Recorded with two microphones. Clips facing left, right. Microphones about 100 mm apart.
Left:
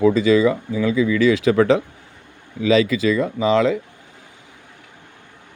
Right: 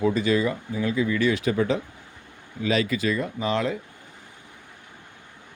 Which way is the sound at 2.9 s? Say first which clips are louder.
Left 6 dB; 90° left.